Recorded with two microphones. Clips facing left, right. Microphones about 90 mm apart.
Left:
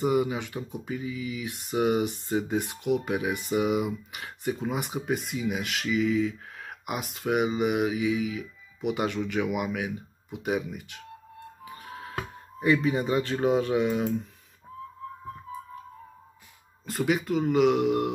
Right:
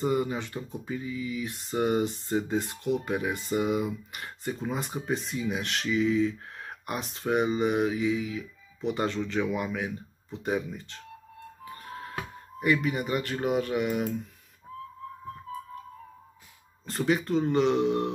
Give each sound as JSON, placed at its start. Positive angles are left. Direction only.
{"t": 0.0, "sound": "speech", "side_deg": 15}
{"t": 11.6, "sound": "music", "side_deg": 15}
{"t": 16.8, "sound": "speech", "side_deg": 10}